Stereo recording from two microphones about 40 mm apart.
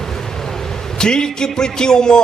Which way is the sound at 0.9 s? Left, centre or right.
Centre.